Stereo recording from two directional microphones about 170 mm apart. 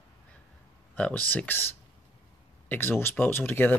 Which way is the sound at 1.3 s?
10° left (ahead or behind).